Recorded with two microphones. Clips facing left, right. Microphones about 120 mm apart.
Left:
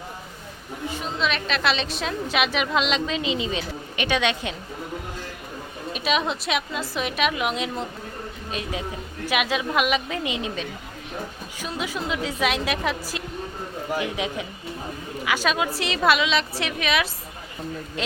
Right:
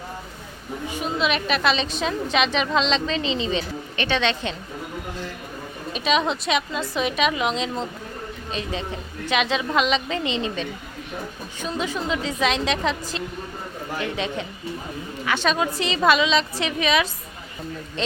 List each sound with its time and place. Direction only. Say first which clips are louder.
0.9 s a woman's voice: right 2 dB; 10° right (ahead or behind); by 4.5 s 10° left (ahead or behind)
5.9 s a woman's voice: right 2 dB; 5° left (ahead or behind)